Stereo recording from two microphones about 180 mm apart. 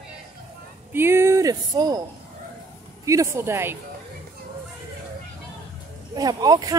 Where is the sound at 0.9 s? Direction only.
15° right (ahead or behind).